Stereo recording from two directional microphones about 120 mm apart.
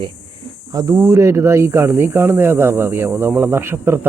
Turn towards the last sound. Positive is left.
turn(degrees=-20)  # may be behind; listen again after turning